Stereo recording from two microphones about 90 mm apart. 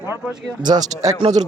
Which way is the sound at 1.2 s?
70° right (ahead or behind).